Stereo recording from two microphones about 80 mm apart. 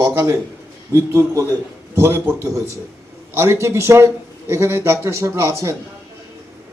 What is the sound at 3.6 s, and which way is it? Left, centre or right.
A man's voice, right.